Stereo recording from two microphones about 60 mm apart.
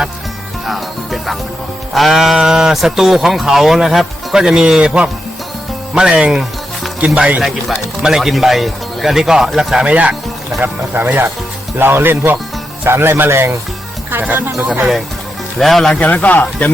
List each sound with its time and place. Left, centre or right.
0.7 s music: centre
1.9 s speech: centre
7.4 s speech: centre
9.8 s speech: right
14.1 s speech: right
15.5 s speech: centre
15.9 s speech: left